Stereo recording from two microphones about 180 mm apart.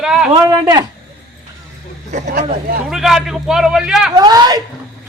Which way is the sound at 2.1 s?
45° right (ahead or behind).